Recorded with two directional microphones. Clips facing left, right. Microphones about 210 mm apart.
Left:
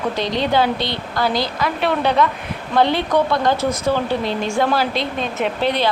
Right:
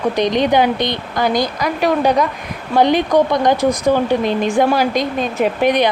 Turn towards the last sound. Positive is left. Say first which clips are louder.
# right 5 dB
turn(degrees=-15)  # may be behind; listen again after turning